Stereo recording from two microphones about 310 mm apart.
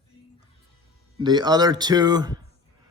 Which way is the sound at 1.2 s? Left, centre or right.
Centre.